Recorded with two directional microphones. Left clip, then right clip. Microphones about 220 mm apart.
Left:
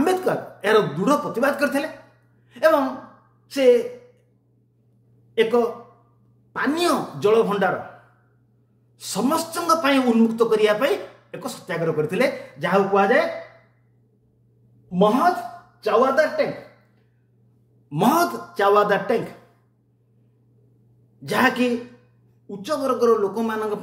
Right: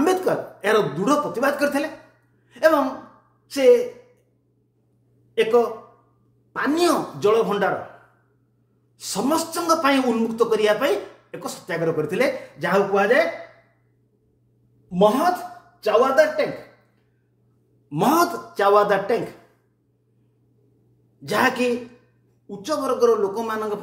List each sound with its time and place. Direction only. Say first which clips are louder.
0.0 s a man's voice: right 1 dB; centre (ahead or behind)
5.3 s a man's voice: right 1 dB; centre (ahead or behind)
8.9 s a man's voice: even; centre (ahead or behind)
14.9 s a man's voice: even; centre (ahead or behind)
17.8 s a man's voice: even; 5° left (ahead or behind)
21.2 s a man's voice: even; 5° left (ahead or behind)